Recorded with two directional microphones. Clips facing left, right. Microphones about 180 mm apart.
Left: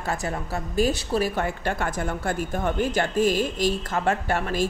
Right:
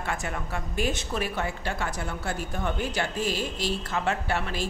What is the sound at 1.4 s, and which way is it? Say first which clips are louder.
A woman's voice: left 4 dB; 55° left (ahead or behind).